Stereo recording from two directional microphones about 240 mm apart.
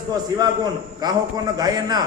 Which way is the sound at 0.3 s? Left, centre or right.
Centre.